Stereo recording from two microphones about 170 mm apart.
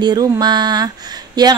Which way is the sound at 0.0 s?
25° right (ahead or behind).